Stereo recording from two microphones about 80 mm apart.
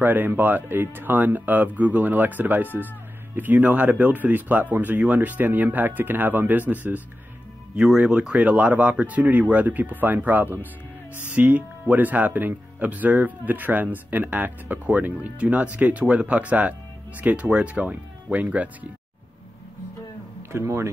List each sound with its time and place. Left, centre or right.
0.0 s speech: right
7.7 s speech: centre
20.5 s speech: right